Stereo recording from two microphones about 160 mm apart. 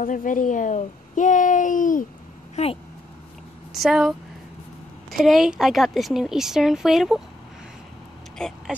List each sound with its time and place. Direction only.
0.0 s a child's voice: 55° left (ahead or behind)
2.5 s speech: 40° left (ahead or behind)
3.8 s a woman's voice: 5° right (ahead or behind)
5.1 s a woman's voice: centre (ahead or behind)
8.4 s speech: 5° left (ahead or behind)